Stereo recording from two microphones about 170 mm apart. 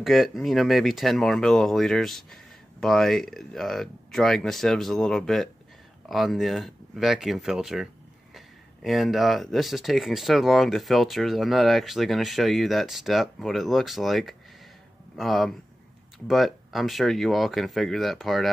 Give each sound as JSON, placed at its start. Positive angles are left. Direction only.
{"t": 0.0, "sound": "speech", "side_deg": 0}